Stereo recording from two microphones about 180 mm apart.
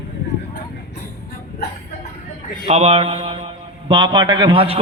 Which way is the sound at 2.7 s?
35° right (ahead or behind).